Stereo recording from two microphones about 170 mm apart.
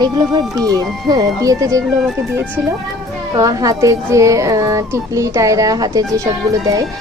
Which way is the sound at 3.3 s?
20° right (ahead or behind).